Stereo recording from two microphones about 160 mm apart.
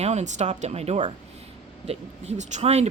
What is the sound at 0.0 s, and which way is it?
Speech, 45° right (ahead or behind).